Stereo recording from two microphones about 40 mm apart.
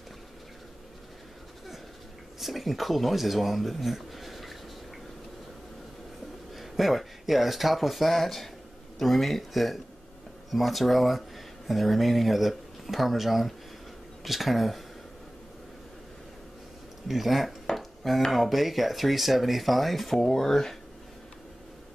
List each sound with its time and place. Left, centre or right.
2.4 s speech: centre
6.5 s speech: centre
17.1 s dishes: centre
18.3 s speech: centre